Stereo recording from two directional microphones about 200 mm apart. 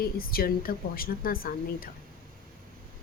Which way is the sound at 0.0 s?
50° left (ahead or behind).